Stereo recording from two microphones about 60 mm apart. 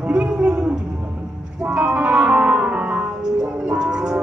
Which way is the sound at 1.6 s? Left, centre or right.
Centre.